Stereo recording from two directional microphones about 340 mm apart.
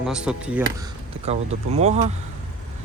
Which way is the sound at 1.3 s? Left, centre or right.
Centre.